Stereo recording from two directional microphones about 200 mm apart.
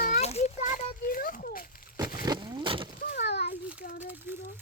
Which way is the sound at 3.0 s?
55° left (ahead or behind).